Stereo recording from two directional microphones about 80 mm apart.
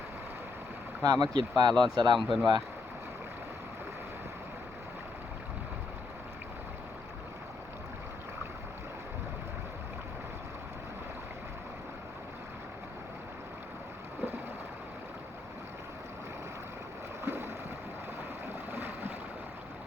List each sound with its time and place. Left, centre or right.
1.0 s speech: right
2.1 s speech: centre
17.2 s a sound: right